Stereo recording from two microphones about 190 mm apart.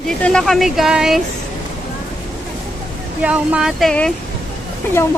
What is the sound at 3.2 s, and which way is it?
Speech, 5° right (ahead or behind).